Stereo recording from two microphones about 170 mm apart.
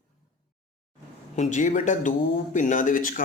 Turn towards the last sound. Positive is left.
turn(degrees=50)  # may be behind; listen again after turning